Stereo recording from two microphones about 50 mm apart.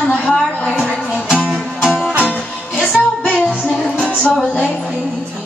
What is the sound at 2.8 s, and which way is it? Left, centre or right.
Music, left.